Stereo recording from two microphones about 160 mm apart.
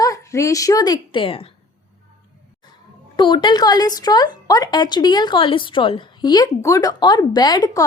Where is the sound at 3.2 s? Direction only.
30° left (ahead or behind).